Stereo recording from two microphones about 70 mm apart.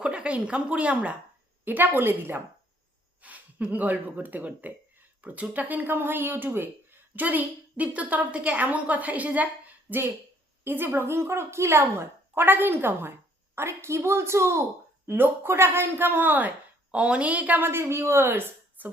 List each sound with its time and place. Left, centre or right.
0.0 s a woman's voice: centre; by 2.4 s right
3.2 s speech: right
15.0 s speech: right
16.9 s speech: centre; by 18.9 s right